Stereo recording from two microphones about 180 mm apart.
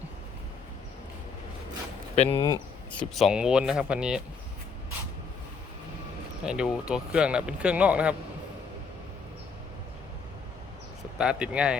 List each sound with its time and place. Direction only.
2.1 s speech: 35° left (ahead or behind)
2.9 s speech: 5° left (ahead or behind)
6.4 s speech: 5° right (ahead or behind)
11.2 s speech: 5° right (ahead or behind)